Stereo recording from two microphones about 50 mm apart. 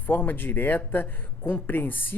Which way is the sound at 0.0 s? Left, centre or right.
Left.